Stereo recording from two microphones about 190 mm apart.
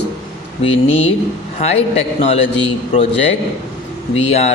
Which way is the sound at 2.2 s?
30° left (ahead or behind).